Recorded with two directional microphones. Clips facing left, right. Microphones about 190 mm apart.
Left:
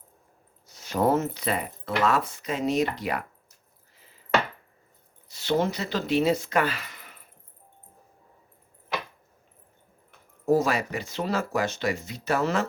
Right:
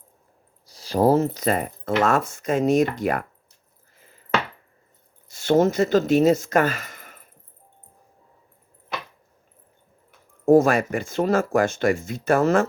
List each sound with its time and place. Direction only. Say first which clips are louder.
0.6 s speech: right 5 dB; 35° right (ahead or behind); by 3.2 s 50° right (ahead or behind)
5.3 s speech: right 7 dB; 45° right (ahead or behind)
10.4 s speech: right 7 dB; 50° right (ahead or behind)